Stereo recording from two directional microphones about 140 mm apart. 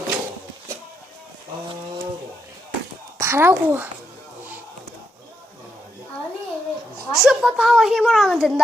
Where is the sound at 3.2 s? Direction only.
20° right (ahead or behind).